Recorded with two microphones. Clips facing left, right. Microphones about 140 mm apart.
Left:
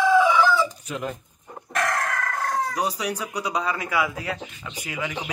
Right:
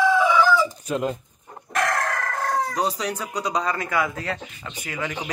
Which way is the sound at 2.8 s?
10° left (ahead or behind).